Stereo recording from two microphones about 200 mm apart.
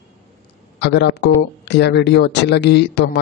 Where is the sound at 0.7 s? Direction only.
60° left (ahead or behind).